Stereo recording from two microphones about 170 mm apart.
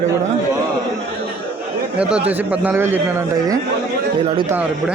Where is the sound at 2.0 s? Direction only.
5° right (ahead or behind).